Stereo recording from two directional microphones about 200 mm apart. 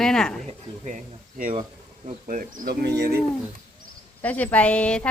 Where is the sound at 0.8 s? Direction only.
40° right (ahead or behind).